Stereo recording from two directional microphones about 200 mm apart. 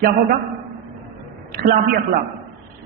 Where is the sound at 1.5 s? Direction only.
45° right (ahead or behind).